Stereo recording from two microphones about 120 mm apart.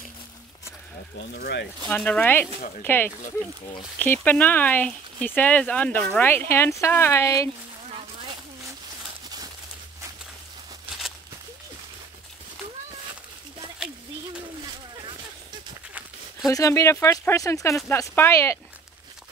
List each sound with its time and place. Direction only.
1.9 s speech: 10° left (ahead or behind)
16.4 s speech: 25° left (ahead or behind)